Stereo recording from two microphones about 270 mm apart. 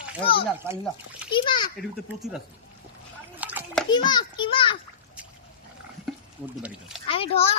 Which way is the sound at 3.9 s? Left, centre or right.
Centre.